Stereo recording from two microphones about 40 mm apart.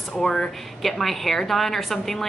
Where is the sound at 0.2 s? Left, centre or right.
Centre.